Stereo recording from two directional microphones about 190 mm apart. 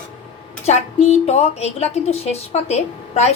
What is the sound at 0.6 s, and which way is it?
Speech, 35° left (ahead or behind).